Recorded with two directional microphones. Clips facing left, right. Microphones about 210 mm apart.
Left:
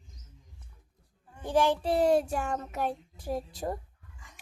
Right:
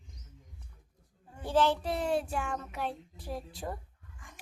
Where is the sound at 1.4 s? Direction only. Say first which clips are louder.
Left 2 dB; 15° left (ahead or behind).